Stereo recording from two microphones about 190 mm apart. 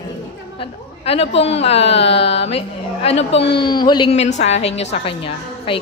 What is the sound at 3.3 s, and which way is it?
A woman's voice, 25° left (ahead or behind).